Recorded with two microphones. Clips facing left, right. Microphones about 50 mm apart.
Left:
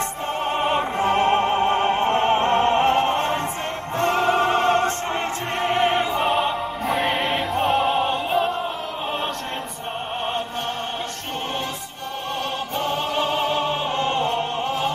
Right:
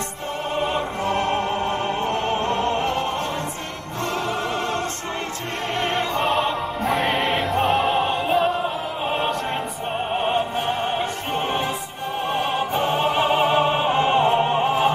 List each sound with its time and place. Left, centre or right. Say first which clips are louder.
0.6 s music: left 2 dB; left
4.0 s opera: left 6 dB; left
5.7 s opera: left 3 dB; centre
12.7 s opera: right 2 dB; centre